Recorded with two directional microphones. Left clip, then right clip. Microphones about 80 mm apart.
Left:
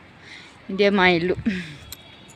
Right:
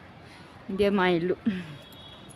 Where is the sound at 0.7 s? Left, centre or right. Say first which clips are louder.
Left 6 dB; left.